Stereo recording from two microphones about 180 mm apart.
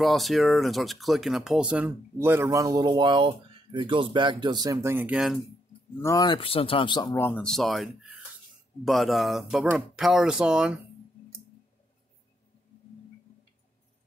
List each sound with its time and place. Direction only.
0.0 s speech: centre (ahead or behind)
5.9 s speech: 20° left (ahead or behind); by 10.8 s 5° right (ahead or behind)